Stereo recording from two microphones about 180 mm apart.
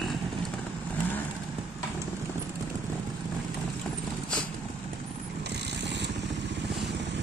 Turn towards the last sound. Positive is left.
turn(degrees=-70)  # may be behind; listen again after turning